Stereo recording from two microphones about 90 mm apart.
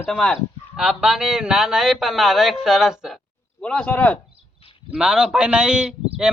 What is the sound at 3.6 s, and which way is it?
Speech, 15° left (ahead or behind).